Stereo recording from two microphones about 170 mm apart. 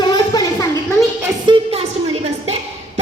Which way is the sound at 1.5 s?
35° right (ahead or behind).